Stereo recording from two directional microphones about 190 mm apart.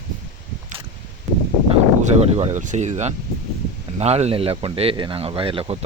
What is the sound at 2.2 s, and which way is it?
Speech, 35° right (ahead or behind).